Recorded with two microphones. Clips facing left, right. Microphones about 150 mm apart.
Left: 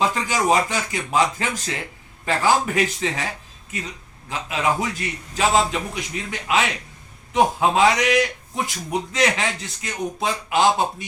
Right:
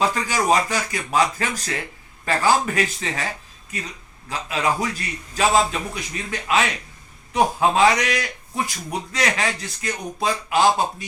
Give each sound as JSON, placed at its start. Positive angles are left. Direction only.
{"t": 0.0, "sound": "a man's voice", "side_deg": 20}